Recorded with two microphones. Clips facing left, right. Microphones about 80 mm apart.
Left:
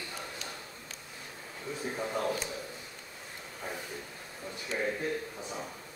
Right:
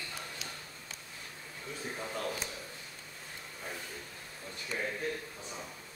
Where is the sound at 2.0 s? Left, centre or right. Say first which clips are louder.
Left 6 dB; left.